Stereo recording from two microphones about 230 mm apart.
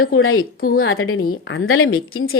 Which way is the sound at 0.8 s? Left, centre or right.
Left.